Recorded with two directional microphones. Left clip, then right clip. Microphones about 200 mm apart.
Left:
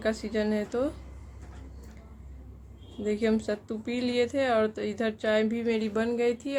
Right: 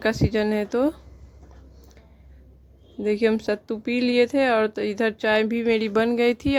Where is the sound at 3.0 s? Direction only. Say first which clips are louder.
Right 6 dB; 45° right (ahead or behind).